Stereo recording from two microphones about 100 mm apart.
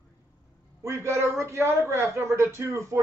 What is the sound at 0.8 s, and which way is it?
A man's voice, 25° right (ahead or behind).